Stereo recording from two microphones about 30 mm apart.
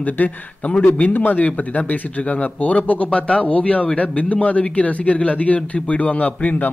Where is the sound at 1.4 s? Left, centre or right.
Left.